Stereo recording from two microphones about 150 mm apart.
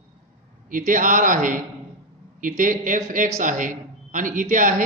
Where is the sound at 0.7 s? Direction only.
60° right (ahead or behind).